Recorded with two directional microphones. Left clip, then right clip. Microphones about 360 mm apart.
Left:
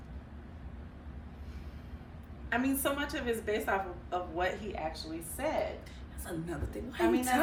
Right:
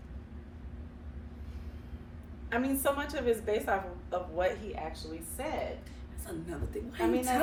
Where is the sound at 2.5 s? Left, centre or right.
Centre.